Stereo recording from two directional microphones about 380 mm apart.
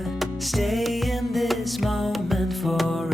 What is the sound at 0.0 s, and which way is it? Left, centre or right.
Music, centre.